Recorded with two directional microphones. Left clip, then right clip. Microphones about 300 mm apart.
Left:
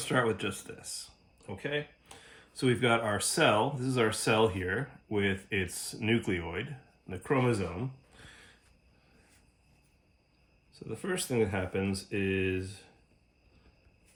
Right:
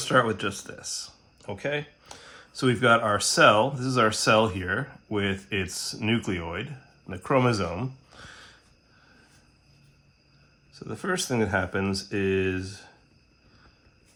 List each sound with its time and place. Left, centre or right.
0.0 s speech: centre
10.8 s speech: centre